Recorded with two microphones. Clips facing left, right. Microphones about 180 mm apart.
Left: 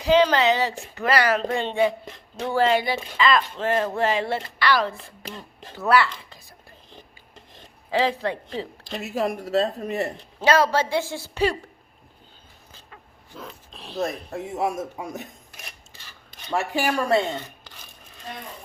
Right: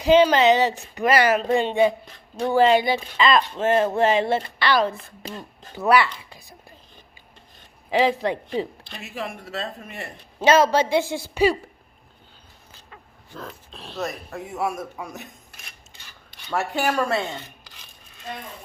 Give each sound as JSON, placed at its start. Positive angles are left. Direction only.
{"t": 0.0, "sound": "a woman's voice", "side_deg": -20}
{"t": 7.9, "sound": "a woman's voice", "side_deg": -15}
{"t": 8.8, "sound": "speech", "side_deg": 40}
{"t": 10.4, "sound": "a woman's voice", "side_deg": -20}
{"t": 13.7, "sound": "speech", "side_deg": 0}
{"t": 14.3, "sound": "a man's voice", "side_deg": 25}
{"t": 16.5, "sound": "speech", "side_deg": 15}